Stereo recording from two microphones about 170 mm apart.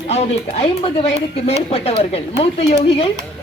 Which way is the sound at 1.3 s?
35° left (ahead or behind).